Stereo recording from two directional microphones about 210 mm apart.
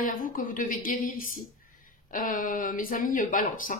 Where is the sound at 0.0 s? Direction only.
40° left (ahead or behind).